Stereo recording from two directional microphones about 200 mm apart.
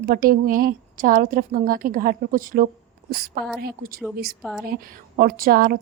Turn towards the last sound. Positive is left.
turn(degrees=-45)  # may be behind; listen again after turning